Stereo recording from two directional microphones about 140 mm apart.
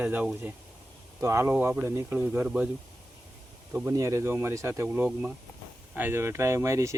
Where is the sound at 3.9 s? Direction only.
20° right (ahead or behind).